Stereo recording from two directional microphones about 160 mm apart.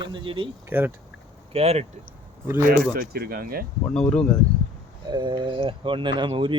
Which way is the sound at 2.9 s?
70° right (ahead or behind).